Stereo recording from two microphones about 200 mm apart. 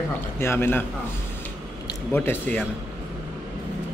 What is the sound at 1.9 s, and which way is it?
Speech, 10° left (ahead or behind).